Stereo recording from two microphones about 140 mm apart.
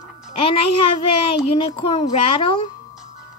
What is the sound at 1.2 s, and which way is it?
Speech, 40° left (ahead or behind).